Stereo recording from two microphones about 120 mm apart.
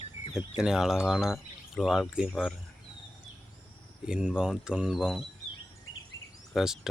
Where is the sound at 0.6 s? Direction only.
5° right (ahead or behind).